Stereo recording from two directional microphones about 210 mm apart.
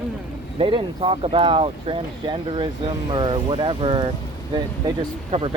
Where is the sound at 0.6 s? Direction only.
25° right (ahead or behind).